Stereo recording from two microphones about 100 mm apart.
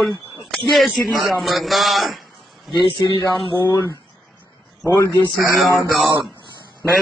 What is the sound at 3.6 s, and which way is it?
Speech, 35° left (ahead or behind).